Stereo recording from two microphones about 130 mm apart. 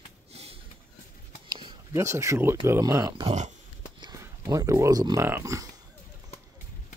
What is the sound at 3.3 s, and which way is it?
Speech, 65° right (ahead or behind).